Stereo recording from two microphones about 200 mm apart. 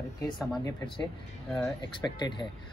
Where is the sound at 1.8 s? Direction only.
20° left (ahead or behind).